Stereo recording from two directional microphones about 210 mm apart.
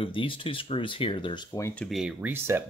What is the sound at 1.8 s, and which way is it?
Speech, centre (ahead or behind).